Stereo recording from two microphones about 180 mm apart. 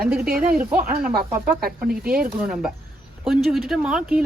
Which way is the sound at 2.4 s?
5° right (ahead or behind).